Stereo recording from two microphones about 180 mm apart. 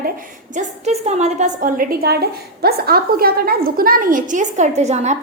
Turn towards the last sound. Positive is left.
turn(degrees=-40)  # may be behind; listen again after turning